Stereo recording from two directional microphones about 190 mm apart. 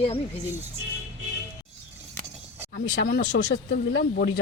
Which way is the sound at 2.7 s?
60° left (ahead or behind).